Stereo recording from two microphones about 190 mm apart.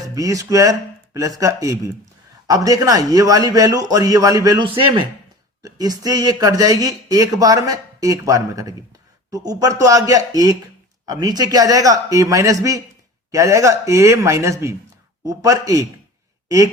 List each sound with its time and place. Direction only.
0.0 s a man's voice: 20° right (ahead or behind)